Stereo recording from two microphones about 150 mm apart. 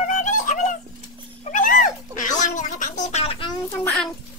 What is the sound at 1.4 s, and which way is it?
Cat, 60° left (ahead or behind).